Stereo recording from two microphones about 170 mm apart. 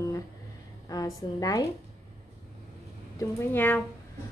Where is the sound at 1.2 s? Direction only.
20° left (ahead or behind).